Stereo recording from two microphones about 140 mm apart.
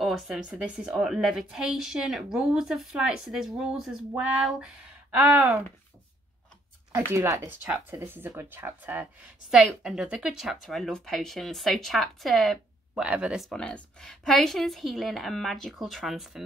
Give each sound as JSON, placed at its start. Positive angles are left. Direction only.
{"t": 0.0, "sound": "a woman's voice", "side_deg": -5}
{"t": 5.1, "sound": "speech", "side_deg": -10}
{"t": 6.9, "sound": "a woman's voice", "side_deg": -20}
{"t": 13.5, "sound": "a woman's voice", "side_deg": 5}